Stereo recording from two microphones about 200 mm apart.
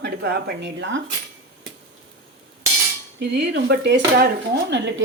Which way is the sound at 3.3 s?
60° right (ahead or behind).